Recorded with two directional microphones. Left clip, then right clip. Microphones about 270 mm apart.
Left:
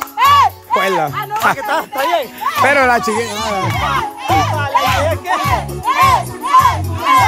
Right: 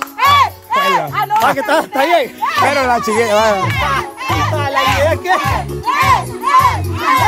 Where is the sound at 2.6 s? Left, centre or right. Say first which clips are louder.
Left 3 dB; centre.